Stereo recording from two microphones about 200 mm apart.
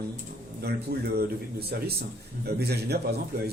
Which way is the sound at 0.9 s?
55° right (ahead or behind).